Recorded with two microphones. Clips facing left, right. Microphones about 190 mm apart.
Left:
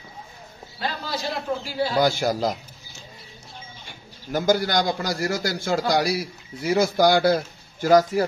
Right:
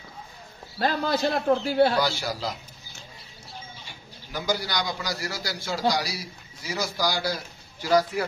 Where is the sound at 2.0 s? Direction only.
50° left (ahead or behind).